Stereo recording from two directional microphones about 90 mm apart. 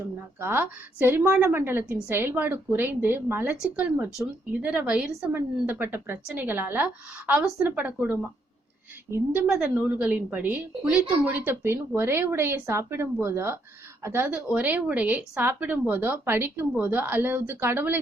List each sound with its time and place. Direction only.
0.0 s a woman's voice: 25° right (ahead or behind)
3.6 s a woman's voice: 15° right (ahead or behind)
9.0 s a woman's voice: 30° right (ahead or behind)
9.5 s a woman's voice: 10° right (ahead or behind)